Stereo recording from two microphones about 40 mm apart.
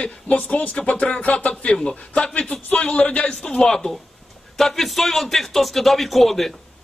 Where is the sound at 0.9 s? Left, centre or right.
Left.